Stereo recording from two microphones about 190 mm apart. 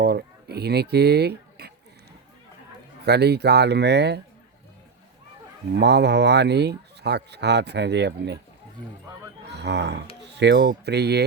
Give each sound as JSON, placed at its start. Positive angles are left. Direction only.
{"t": 0.0, "sound": "speech", "side_deg": -55}
{"t": 3.0, "sound": "speech", "side_deg": -60}
{"t": 5.7, "sound": "speech", "side_deg": -60}
{"t": 9.5, "sound": "speech", "side_deg": -65}